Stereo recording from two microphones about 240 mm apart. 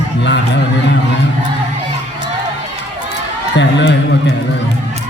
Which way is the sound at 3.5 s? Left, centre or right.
Left.